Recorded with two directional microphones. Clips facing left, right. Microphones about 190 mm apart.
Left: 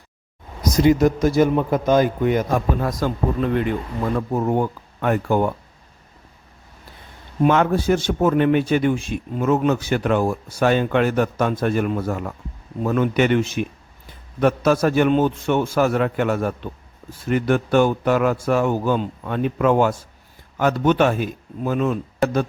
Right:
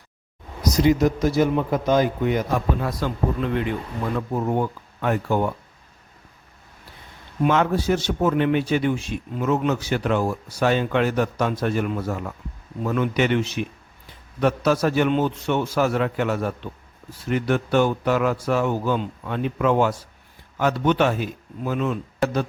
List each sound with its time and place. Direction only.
0.6 s a man's voice: 50° left (ahead or behind)
7.4 s a man's voice: 50° left (ahead or behind)